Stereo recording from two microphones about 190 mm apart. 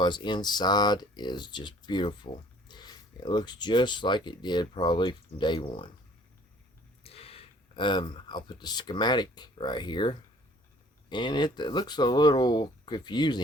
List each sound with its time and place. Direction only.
0.0 s speech: 25° left (ahead or behind)
7.0 s speech: 30° left (ahead or behind)